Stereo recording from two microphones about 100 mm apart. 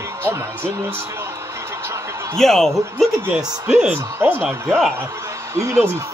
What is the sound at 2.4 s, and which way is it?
Speech, 5° left (ahead or behind).